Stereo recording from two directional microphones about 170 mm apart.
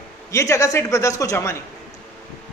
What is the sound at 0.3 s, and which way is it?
A man's voice, 15° left (ahead or behind).